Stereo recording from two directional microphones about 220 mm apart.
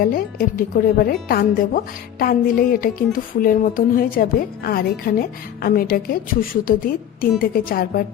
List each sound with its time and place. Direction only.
0.0 s speech: 40° left (ahead or behind)